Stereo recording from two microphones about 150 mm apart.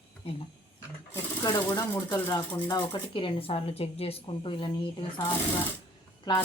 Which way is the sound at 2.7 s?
30° left (ahead or behind).